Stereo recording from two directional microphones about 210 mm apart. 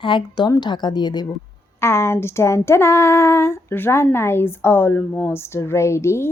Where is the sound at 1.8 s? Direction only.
10° left (ahead or behind).